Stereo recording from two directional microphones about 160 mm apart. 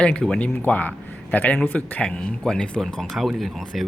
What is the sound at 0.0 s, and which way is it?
Speech, 5° left (ahead or behind).